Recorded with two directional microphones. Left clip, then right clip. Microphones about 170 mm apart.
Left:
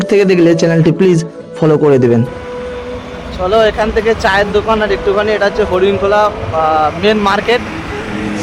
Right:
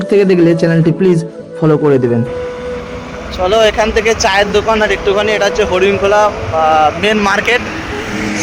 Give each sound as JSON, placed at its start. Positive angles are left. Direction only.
{"t": 0.1, "sound": "speech", "side_deg": 30}
{"t": 3.4, "sound": "speech", "side_deg": 0}